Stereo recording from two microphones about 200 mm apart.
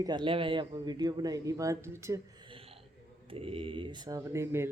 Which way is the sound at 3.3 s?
30° right (ahead or behind).